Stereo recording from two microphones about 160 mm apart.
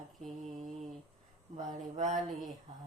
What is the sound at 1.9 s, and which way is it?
Speech, 45° right (ahead or behind).